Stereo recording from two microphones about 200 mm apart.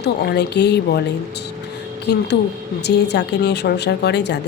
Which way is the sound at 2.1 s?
55° left (ahead or behind).